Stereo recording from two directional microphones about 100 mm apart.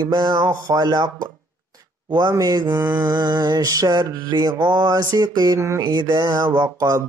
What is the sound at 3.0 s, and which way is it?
Mantra, 45° right (ahead or behind).